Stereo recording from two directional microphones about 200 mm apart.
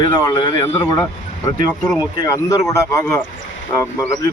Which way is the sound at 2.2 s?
15° left (ahead or behind).